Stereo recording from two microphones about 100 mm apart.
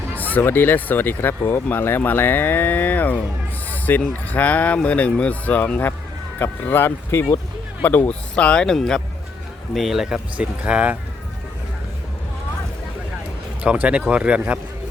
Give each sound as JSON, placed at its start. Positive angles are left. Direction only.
{"t": 0.2, "sound": "speech", "side_deg": 15}
{"t": 13.6, "sound": "speech", "side_deg": -10}